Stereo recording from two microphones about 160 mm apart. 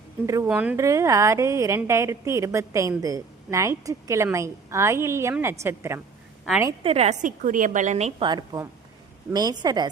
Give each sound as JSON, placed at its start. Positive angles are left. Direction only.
{"t": 0.3, "sound": "a woman's voice", "side_deg": -20}
{"t": 0.5, "sound": "a woman's voice", "side_deg": -10}
{"t": 0.8, "sound": "a woman's voice", "side_deg": -20}
{"t": 6.8, "sound": "a woman's voice", "side_deg": -40}
{"t": 8.2, "sound": "a woman's voice", "side_deg": -25}